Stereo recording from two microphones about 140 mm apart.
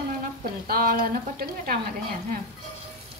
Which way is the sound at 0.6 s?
90° right.